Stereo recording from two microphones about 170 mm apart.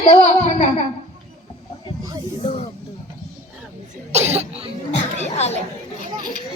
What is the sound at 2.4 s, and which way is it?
Music, 35° left (ahead or behind).